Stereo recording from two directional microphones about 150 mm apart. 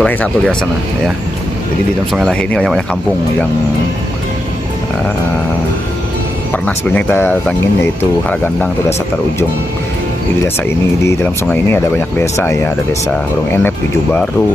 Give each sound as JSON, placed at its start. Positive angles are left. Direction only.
{"t": 0.0, "sound": "speech", "side_deg": 5}
{"t": 2.1, "sound": "speech", "side_deg": 5}
{"t": 6.5, "sound": "speech", "side_deg": 10}
{"t": 11.4, "sound": "speech", "side_deg": 15}